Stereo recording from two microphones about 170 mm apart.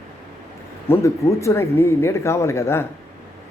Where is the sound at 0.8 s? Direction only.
15° left (ahead or behind).